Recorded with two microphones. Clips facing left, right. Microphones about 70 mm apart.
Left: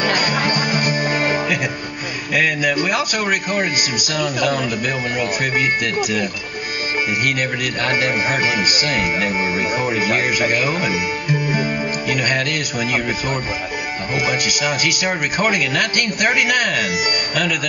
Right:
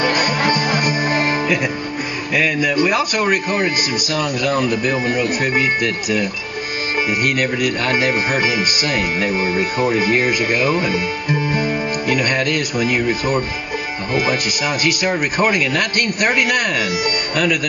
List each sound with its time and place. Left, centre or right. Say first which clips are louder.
1.0 s music: right 1 dB; right
2.3 s speech: right 1 dB; left
5.6 s speech: even; left
7.2 s speech: right 3 dB; left
9.3 s speech: right 1 dB; centre
10.0 s speech: right 1 dB; left
10.5 s speech: right 2 dB; right
12.1 s music: right 2 dB; right
14.2 s speech: right 1 dB; right
16.0 s speech: right 1 dB; right